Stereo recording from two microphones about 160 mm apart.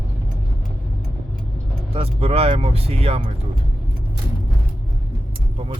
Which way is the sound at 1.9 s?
35° right (ahead or behind).